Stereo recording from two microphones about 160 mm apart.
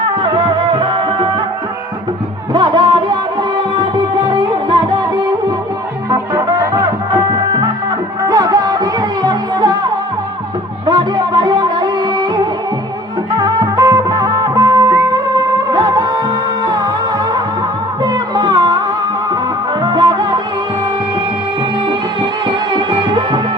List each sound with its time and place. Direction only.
0.0 s music: 35° right (ahead or behind)
2.5 s music: 30° right (ahead or behind)
6.1 s music: 20° right (ahead or behind)
13.4 s music: 25° right (ahead or behind)
18.0 s music: 25° right (ahead or behind)
19.8 s music: 30° right (ahead or behind)
22.2 s music: 30° right (ahead or behind)